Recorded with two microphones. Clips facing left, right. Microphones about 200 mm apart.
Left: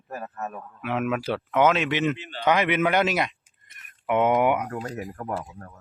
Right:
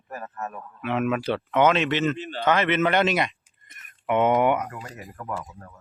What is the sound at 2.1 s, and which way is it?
Speech, 45° right (ahead or behind).